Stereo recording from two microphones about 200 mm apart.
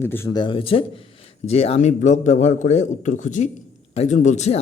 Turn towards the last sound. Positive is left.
turn(degrees=35)  # may be behind; listen again after turning